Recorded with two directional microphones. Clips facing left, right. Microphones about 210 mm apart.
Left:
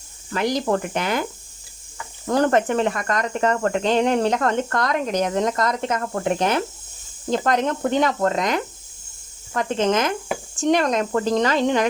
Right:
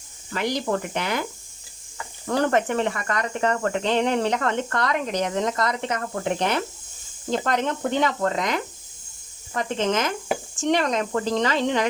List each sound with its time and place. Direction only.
0.3 s speech: 45° left (ahead or behind)
2.2 s speech: 40° left (ahead or behind)